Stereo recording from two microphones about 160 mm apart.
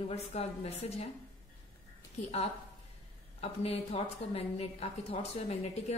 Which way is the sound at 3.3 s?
40° left (ahead or behind).